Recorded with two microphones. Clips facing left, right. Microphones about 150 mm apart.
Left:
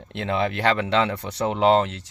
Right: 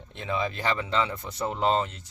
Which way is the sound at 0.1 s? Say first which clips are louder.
Left 5 dB; 75° left (ahead or behind).